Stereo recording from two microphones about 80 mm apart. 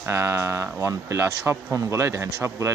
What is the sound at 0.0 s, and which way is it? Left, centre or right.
Speech, right.